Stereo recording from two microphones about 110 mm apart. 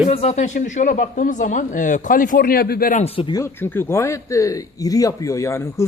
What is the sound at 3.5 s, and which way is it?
Speech, 20° left (ahead or behind).